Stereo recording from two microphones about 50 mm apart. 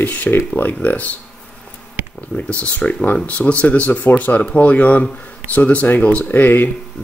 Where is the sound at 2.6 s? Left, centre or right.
Left.